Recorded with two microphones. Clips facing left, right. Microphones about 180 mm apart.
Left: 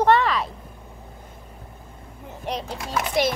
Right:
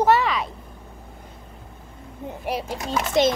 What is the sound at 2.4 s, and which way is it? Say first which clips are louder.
Speech: right 2 dB; 10° right (ahead or behind).